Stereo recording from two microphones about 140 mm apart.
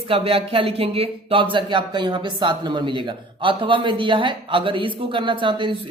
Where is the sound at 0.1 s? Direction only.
40° right (ahead or behind).